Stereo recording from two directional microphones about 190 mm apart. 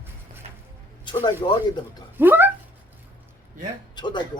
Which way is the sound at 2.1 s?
10° right (ahead or behind).